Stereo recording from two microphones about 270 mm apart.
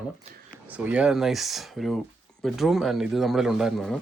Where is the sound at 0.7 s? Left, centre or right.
Centre.